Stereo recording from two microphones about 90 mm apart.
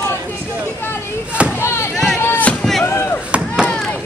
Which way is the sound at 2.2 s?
20° left (ahead or behind).